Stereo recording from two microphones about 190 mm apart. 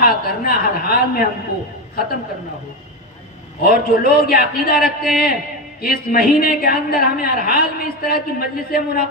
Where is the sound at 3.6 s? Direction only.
55° left (ahead or behind).